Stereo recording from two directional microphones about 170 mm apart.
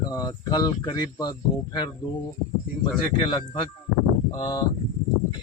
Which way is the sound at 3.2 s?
25° left (ahead or behind).